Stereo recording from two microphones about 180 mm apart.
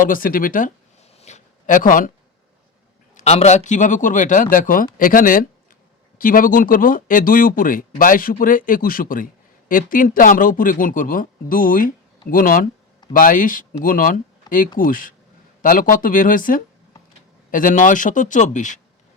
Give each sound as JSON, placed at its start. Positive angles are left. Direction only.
{"t": 0.0, "sound": "speech", "side_deg": 50}
{"t": 1.2, "sound": "a sound", "side_deg": 45}
{"t": 3.2, "sound": "speech", "side_deg": 40}